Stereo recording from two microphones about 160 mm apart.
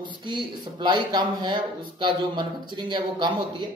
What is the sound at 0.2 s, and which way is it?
Speech, 30° right (ahead or behind).